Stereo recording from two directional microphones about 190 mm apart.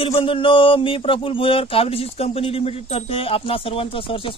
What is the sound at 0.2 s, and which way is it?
Speech, 25° left (ahead or behind).